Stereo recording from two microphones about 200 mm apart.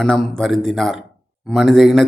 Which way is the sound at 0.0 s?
5° left (ahead or behind).